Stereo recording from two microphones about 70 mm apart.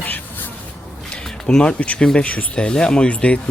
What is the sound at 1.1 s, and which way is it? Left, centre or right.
Speech, centre.